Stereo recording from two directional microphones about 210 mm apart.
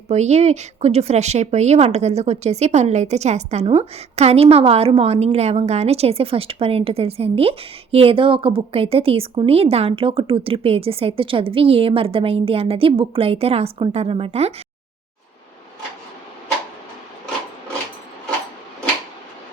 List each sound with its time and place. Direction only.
0.1 s a woman's voice: 30° right (ahead or behind)